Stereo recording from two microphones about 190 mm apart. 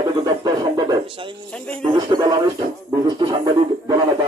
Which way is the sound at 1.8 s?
25° right (ahead or behind).